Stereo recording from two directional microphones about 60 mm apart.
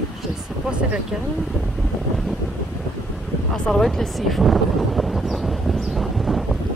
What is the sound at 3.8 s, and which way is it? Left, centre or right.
Speech, centre.